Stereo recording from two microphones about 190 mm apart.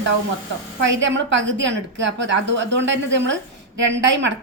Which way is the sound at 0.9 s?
75° right (ahead or behind).